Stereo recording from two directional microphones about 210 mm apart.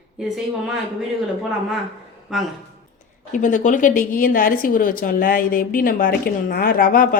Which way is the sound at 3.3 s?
35° left (ahead or behind).